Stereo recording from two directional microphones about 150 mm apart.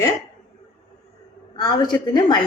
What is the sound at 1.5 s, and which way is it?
Speech, 30° left (ahead or behind).